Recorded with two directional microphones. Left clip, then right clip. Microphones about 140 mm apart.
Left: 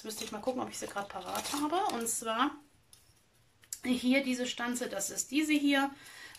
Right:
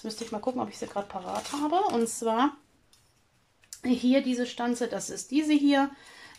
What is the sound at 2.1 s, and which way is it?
Speech, 45° right (ahead or behind).